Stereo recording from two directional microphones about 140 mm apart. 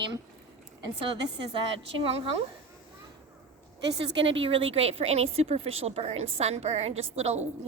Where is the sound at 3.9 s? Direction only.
40° right (ahead or behind).